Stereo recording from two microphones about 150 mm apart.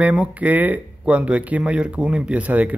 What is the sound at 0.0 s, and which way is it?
A man's voice, 10° right (ahead or behind).